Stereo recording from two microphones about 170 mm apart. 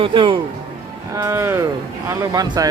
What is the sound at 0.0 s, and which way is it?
Speech, 30° right (ahead or behind).